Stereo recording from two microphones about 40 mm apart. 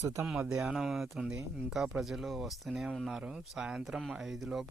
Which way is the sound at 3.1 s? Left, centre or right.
Centre.